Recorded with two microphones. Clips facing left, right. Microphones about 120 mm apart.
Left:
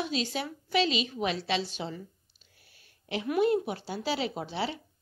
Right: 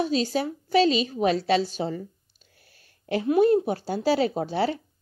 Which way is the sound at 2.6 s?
45° right (ahead or behind).